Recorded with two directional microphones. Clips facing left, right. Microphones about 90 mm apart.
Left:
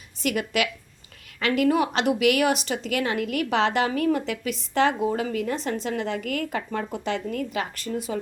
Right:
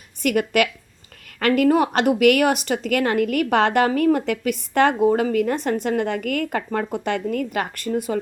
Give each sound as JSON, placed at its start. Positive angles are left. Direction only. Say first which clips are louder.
{"t": 0.2, "sound": "a woman's voice", "louder": "right 6 dB", "side_deg": -50}